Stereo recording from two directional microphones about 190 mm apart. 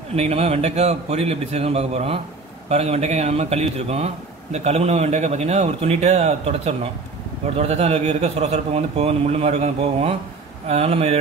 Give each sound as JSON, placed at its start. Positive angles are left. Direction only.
{"t": 0.1, "sound": "a man's voice", "side_deg": -35}